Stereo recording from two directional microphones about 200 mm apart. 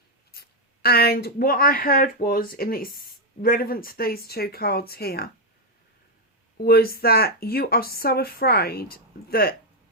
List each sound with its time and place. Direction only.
0.3 s speech: 50° left (ahead or behind)
6.6 s speech: 50° left (ahead or behind)